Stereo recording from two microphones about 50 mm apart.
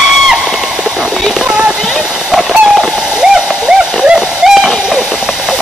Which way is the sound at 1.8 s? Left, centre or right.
Centre.